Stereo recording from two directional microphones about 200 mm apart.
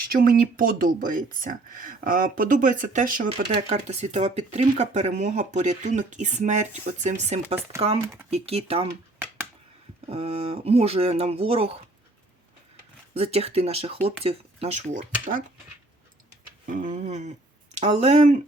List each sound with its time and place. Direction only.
0.1 s speech: 45° right (ahead or behind)
8.0 s speech: 10° right (ahead or behind)
8.3 s speech: 30° right (ahead or behind)
10.1 s speech: 30° right (ahead or behind)
13.1 s speech: 30° right (ahead or behind)
16.6 s speech: 40° right (ahead or behind)